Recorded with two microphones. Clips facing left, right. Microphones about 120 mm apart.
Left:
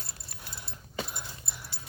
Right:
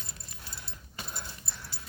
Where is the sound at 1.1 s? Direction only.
15° left (ahead or behind).